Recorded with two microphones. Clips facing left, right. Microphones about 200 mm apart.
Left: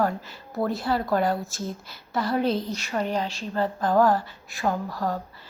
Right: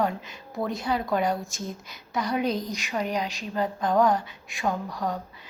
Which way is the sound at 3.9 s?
5° left (ahead or behind).